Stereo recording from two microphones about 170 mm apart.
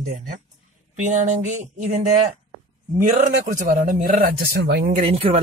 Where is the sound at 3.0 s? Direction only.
45° right (ahead or behind); by 4.9 s 65° right (ahead or behind).